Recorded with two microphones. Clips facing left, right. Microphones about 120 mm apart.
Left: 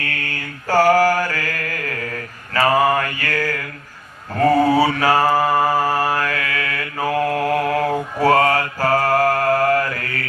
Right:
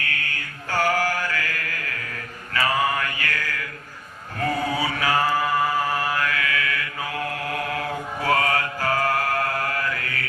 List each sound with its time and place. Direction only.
0.0 s mantra: 40° left (ahead or behind)